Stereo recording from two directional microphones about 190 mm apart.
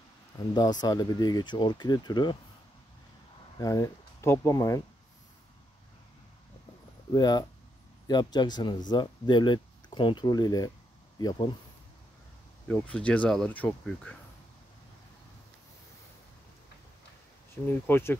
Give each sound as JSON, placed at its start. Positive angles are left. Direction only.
{"t": 0.4, "sound": "speech", "side_deg": 20}
{"t": 3.5, "sound": "speech", "side_deg": 20}
{"t": 7.1, "sound": "speech", "side_deg": 20}
{"t": 12.6, "sound": "speech", "side_deg": 10}
{"t": 17.6, "sound": "speech", "side_deg": 10}